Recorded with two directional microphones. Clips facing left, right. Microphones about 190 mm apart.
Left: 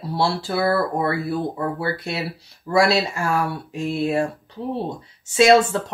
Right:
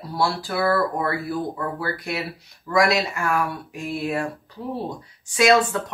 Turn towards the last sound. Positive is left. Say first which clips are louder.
# left 3 dB
turn(degrees=25)  # may be behind; listen again after turning